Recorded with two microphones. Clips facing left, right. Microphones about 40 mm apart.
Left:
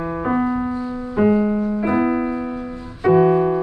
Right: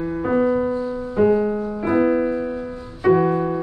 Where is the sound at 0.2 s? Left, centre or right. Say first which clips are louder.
Right 2 dB; centre.